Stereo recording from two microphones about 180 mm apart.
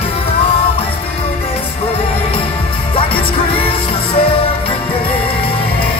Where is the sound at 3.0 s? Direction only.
30° left (ahead or behind).